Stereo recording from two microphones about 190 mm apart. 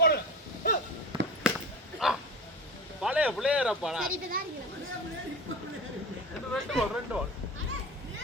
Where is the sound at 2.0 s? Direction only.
5° right (ahead or behind).